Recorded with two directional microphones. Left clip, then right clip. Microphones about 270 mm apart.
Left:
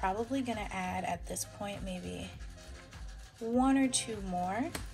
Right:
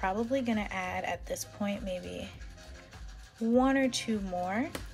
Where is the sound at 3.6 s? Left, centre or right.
Right.